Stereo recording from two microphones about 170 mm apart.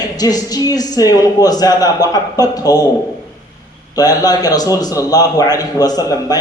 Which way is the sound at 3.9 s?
20° left (ahead or behind).